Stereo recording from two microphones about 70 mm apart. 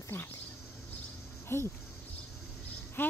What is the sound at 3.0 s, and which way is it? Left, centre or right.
Speech, left.